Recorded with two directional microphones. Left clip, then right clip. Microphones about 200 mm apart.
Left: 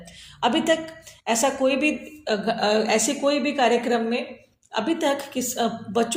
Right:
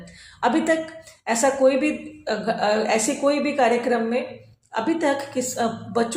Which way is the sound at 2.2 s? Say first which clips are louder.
Even; 30° left (ahead or behind).